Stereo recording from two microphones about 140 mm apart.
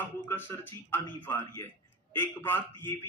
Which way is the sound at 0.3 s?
15° left (ahead or behind).